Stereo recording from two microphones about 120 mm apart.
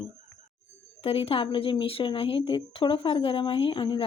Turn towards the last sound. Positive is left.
turn(degrees=45)  # may be behind; listen again after turning